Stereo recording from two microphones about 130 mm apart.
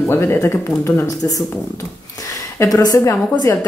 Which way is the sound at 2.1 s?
25° left (ahead or behind).